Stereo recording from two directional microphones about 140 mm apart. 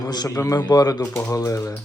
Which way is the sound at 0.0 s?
30° left (ahead or behind).